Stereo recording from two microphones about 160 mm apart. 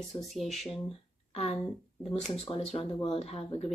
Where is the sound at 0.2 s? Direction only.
Centre (ahead or behind).